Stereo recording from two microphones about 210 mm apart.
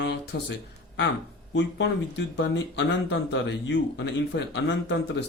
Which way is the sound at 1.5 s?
55° left (ahead or behind).